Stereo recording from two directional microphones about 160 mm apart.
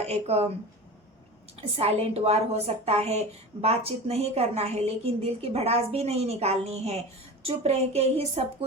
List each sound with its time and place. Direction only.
0.0 s a woman's voice: 40° right (ahead or behind)
1.7 s a woman's voice: 40° right (ahead or behind)